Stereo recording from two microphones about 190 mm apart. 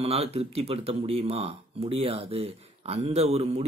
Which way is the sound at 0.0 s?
35° right (ahead or behind).